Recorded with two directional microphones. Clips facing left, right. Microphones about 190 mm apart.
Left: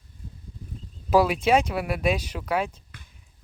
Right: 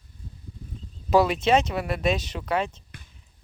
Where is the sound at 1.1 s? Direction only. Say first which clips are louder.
Even; 10° left (ahead or behind).